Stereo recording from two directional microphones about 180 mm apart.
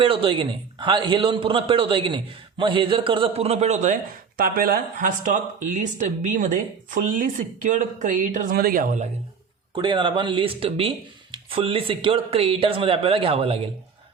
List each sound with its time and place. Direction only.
0.0 s a man's voice: 30° right (ahead or behind)
4.4 s speech: 55° right (ahead or behind)
9.7 s a man's voice: 25° right (ahead or behind)